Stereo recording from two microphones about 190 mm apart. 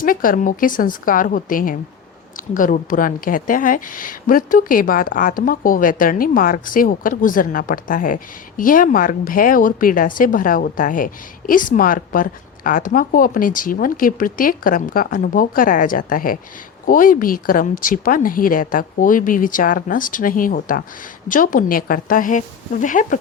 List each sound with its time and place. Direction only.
0.0 s speech: 45° left (ahead or behind)